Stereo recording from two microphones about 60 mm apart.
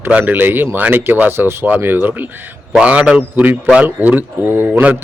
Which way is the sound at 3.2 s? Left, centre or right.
Right.